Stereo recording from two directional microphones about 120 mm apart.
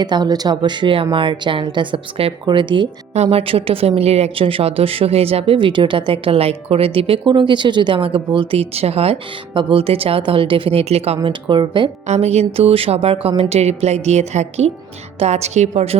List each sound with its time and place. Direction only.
0.0 s a woman's voice: 35° right (ahead or behind)
3.2 s a woman's voice: 55° right (ahead or behind)
12.0 s a woman's voice: 65° right (ahead or behind)
12.5 s a woman's voice: 55° right (ahead or behind)